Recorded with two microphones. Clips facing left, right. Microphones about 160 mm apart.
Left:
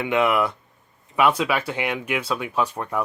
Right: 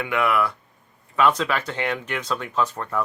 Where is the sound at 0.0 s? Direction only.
20° left (ahead or behind).